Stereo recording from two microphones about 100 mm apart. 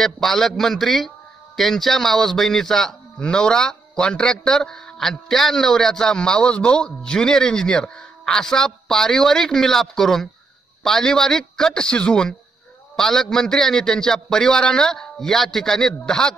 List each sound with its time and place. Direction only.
0.0 s speech: 5° left (ahead or behind)